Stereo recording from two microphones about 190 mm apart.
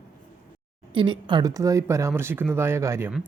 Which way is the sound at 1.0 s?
25° right (ahead or behind).